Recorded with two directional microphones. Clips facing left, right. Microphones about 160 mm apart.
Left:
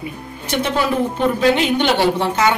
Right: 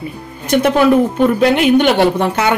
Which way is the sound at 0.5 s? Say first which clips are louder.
Right 8 dB; 55° right (ahead or behind).